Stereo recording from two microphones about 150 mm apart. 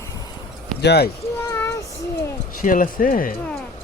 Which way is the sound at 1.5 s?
20° left (ahead or behind).